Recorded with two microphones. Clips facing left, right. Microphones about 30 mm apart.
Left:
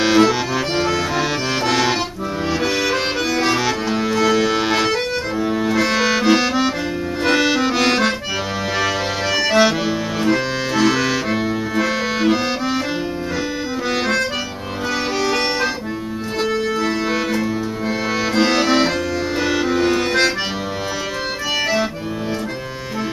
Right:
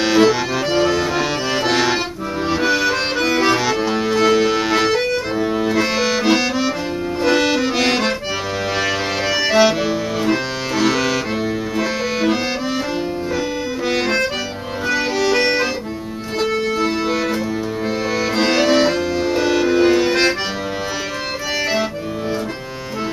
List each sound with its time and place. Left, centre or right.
0.2 s accordion: centre
3.4 s music: centre
5.4 s accordion: centre
8.7 s music: centre
13.8 s accordion: centre
16.5 s music: centre
17.0 s music: centre
18.3 s music: centre
19.8 s accordion: centre